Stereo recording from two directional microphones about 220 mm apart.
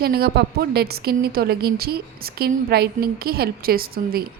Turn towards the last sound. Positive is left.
turn(degrees=-45)  # may be behind; listen again after turning